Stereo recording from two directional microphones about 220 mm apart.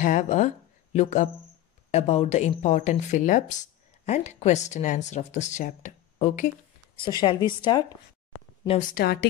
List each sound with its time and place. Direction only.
0.0 s speech: 35° left (ahead or behind)
7.0 s a woman's voice: 20° left (ahead or behind)
8.9 s a woman's voice: 45° left (ahead or behind)